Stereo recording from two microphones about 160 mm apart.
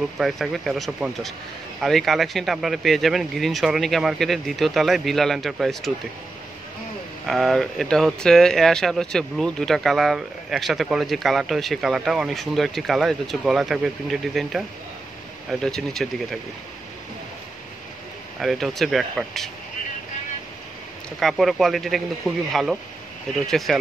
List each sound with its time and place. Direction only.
0.2 s speech: centre (ahead or behind)
7.2 s speech: centre (ahead or behind)
15.6 s speech: 5° left (ahead or behind)
18.4 s speech: centre (ahead or behind)
21.2 s speech: centre (ahead or behind)